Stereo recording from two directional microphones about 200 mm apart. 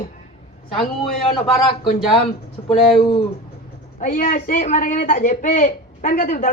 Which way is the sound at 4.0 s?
45° left (ahead or behind).